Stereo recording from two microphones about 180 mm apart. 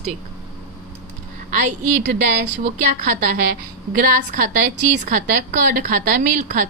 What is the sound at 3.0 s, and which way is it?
A woman's voice, 50° right (ahead or behind).